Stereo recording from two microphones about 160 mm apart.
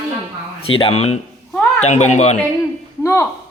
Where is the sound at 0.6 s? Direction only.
35° left (ahead or behind).